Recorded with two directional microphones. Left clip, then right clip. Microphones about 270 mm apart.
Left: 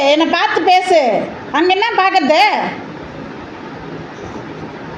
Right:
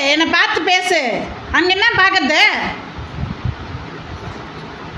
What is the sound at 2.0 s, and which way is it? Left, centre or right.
Speech, right.